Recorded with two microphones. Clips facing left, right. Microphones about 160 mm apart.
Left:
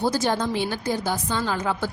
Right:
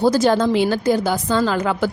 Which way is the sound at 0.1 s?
90° right.